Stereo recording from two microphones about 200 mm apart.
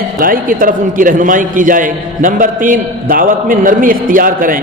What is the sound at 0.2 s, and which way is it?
A man's voice, 45° right (ahead or behind).